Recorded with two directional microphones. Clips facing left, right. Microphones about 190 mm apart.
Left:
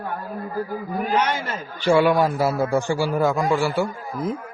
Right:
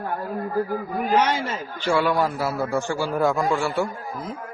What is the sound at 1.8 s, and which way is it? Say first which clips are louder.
A man's voice: left 4 dB; 15° left (ahead or behind).